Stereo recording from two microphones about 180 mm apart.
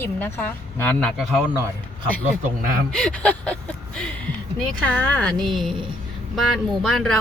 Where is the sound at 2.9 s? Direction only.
5° left (ahead or behind).